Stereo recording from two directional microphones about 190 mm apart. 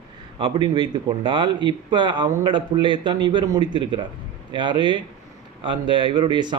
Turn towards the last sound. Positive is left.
turn(degrees=-25)  # may be behind; listen again after turning